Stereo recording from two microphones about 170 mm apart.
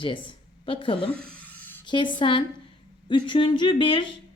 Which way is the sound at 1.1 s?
10° left (ahead or behind).